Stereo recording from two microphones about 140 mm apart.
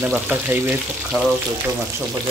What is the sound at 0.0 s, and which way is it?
Speech, 15° right (ahead or behind).